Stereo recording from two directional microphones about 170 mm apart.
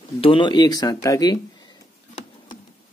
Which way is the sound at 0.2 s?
30° left (ahead or behind).